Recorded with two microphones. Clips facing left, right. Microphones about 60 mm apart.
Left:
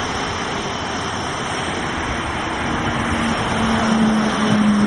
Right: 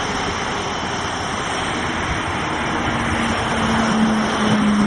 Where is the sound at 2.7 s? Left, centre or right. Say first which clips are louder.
Even; centre.